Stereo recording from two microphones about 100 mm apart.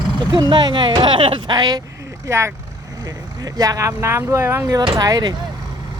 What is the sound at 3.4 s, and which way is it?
Speech, 35° right (ahead or behind).